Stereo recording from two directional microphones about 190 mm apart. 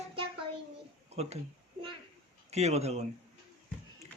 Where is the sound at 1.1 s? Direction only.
35° right (ahead or behind).